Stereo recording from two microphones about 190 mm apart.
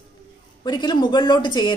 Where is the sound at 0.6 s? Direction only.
20° left (ahead or behind).